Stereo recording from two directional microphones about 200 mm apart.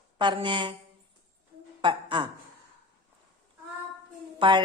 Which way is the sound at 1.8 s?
25° right (ahead or behind).